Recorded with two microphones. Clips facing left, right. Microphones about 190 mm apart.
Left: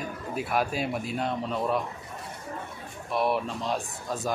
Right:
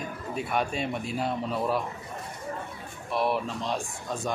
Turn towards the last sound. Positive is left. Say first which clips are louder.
# left 1 dB
turn(degrees=5)  # may be behind; listen again after turning